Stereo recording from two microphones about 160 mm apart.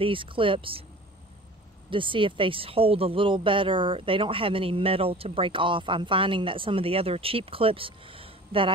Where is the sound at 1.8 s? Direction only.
30° right (ahead or behind).